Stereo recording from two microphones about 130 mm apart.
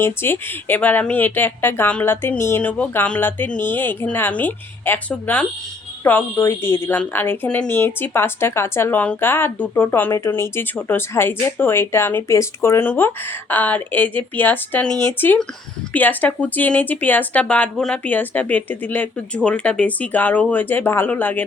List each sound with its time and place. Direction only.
0.0 s speech: 15° left (ahead or behind)